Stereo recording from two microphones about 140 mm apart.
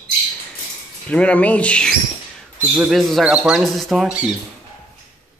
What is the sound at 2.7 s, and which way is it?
Speech, 5° right (ahead or behind).